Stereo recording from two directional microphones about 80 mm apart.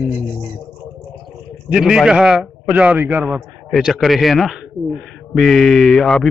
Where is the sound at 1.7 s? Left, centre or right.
Centre.